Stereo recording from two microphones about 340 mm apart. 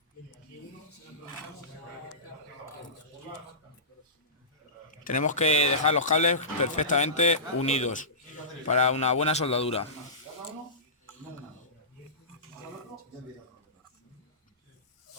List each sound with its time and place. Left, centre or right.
4.9 s speech: left